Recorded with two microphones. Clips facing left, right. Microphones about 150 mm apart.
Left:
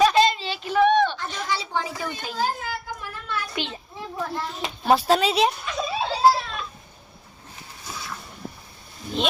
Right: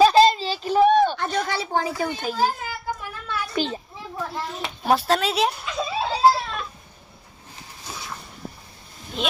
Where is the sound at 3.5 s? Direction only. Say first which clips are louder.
Right 6 dB; 40° right (ahead or behind).